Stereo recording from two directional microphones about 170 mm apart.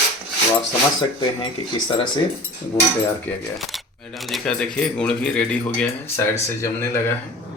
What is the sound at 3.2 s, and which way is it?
Speech, centre (ahead or behind).